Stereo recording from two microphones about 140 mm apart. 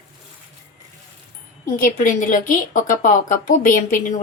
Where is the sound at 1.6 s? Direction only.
75° left (ahead or behind).